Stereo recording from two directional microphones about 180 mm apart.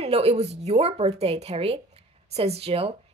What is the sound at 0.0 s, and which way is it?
Speech, 35° right (ahead or behind).